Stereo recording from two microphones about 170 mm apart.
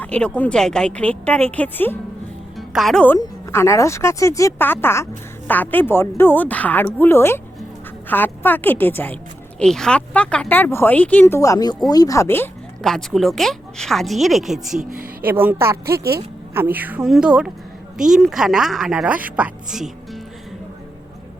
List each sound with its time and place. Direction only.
0.0 s speech: 5° left (ahead or behind)
2.6 s speech: centre (ahead or behind)
12.8 s a woman's voice: 5° left (ahead or behind)